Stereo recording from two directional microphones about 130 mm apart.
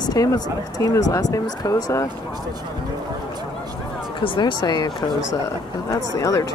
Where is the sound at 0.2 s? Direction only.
25° left (ahead or behind).